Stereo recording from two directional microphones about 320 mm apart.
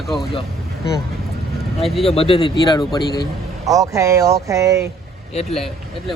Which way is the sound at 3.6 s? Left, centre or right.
Centre.